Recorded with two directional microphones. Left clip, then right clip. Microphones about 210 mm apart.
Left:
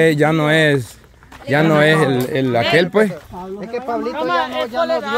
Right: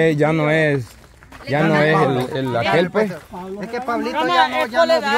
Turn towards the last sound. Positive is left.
turn(degrees=-55)  # may be behind; listen again after turning